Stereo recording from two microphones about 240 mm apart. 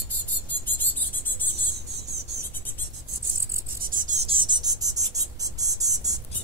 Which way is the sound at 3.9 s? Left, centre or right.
Right.